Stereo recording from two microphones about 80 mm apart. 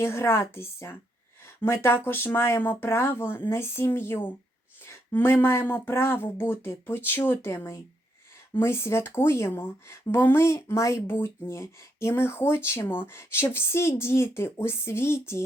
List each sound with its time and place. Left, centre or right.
0.0 s speech: left